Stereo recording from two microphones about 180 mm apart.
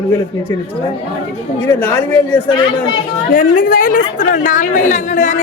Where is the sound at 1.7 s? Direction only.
10° left (ahead or behind).